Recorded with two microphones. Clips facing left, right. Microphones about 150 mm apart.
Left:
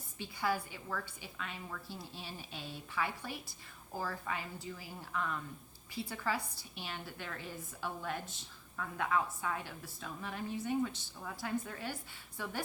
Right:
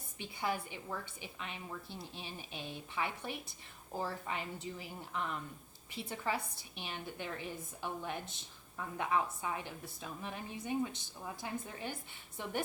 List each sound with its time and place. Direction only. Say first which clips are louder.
0.2 s a woman's voice: left 2 dB; 20° right (ahead or behind)